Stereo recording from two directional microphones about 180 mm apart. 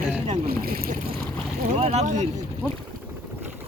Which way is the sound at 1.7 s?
40° right (ahead or behind).